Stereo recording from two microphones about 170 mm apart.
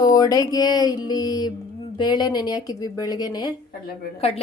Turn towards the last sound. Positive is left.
turn(degrees=35)  # may be behind; listen again after turning